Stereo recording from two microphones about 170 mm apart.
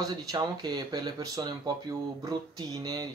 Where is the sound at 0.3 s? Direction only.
25° right (ahead or behind).